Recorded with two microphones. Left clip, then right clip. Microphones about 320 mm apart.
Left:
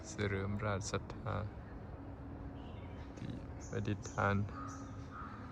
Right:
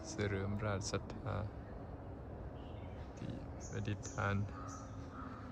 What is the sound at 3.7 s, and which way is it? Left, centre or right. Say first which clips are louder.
Speech: left 5 dB; centre.